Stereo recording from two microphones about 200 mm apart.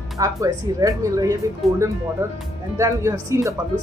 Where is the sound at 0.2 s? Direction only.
15° right (ahead or behind).